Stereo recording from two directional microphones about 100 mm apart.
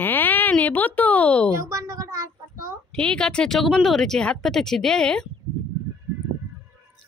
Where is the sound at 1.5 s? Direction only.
35° right (ahead or behind).